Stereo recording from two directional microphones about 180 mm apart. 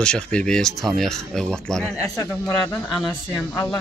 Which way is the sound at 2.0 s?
15° left (ahead or behind).